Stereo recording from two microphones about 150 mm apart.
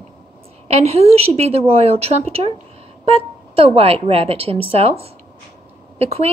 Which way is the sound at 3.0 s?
40° right (ahead or behind).